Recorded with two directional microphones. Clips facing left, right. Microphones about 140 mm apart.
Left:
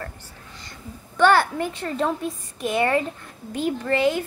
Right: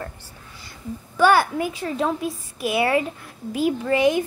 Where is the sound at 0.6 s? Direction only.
5° right (ahead or behind).